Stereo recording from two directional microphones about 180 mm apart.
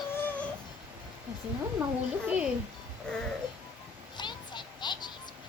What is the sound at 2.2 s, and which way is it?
Speech, 5° right (ahead or behind).